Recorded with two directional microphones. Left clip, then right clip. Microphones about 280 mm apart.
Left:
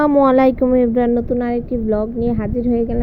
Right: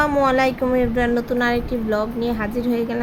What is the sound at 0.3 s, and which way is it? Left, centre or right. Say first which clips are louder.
A woman's voice: left 5 dB; left.